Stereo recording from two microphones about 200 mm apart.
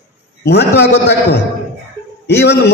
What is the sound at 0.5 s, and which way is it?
A man's voice, 55° left (ahead or behind).